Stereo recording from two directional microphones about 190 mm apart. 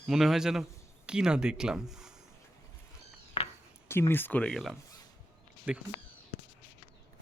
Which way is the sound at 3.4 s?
30° left (ahead or behind).